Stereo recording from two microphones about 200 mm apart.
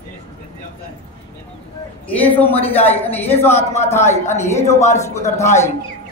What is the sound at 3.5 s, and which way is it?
Speech, 35° left (ahead or behind).